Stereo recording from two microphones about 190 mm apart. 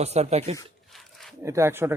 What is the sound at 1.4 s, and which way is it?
Speech, 15° right (ahead or behind).